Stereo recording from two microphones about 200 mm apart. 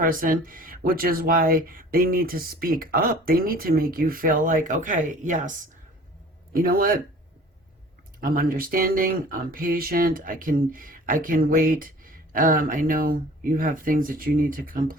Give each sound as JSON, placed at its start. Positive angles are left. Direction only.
{"t": 0.0, "sound": "speech", "side_deg": -45}
{"t": 8.2, "sound": "speech", "side_deg": -45}